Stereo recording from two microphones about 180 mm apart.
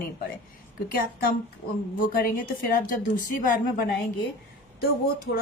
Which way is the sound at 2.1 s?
50° left (ahead or behind).